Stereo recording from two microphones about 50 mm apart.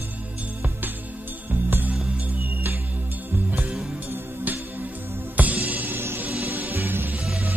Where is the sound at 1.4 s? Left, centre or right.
Right.